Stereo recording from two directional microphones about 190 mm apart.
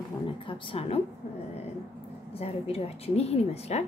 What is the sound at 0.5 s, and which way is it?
Speech, 30° left (ahead or behind).